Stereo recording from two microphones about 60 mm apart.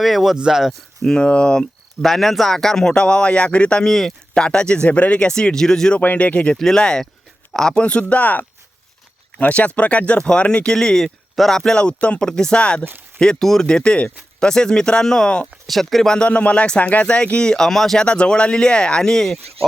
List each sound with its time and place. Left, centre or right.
0.0 s speech: centre
1.0 s speech: centre
2.0 s speech: centre
3.8 s speech: centre
4.4 s speech: centre
6.0 s speech: left
6.6 s speech: centre
15.6 s speech: centre
16.1 s speech: centre
18.0 s speech: centre